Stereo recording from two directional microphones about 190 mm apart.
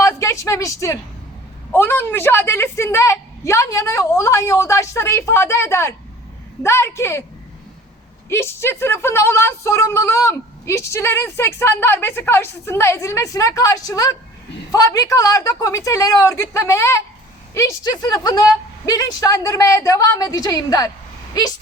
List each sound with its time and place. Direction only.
0.0 s a sound: 15° left (ahead or behind)
1.7 s speech: 10° left (ahead or behind)
8.3 s a woman's voice: 15° left (ahead or behind)